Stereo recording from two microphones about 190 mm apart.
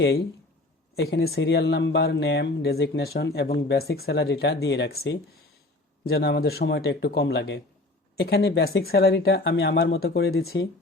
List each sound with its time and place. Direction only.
0.9 s speech: 55° left (ahead or behind)